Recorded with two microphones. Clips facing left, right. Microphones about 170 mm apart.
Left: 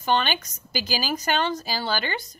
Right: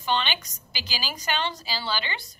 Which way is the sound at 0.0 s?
45° left (ahead or behind).